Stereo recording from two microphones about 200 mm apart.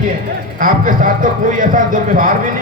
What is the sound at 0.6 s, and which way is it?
Speech, 45° right (ahead or behind).